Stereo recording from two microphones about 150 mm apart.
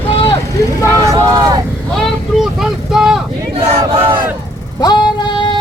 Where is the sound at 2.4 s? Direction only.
5° right (ahead or behind).